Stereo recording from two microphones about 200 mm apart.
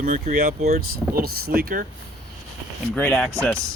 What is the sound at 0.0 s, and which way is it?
Speech, 40° right (ahead or behind).